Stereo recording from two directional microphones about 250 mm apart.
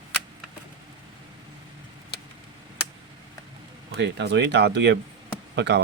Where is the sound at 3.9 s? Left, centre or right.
Right.